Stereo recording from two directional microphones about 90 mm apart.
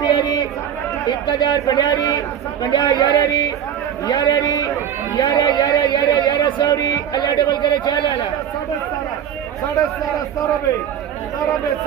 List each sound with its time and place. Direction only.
0.0 s chatter: 50° left (ahead or behind)
1.3 s a man's voice: 50° left (ahead or behind)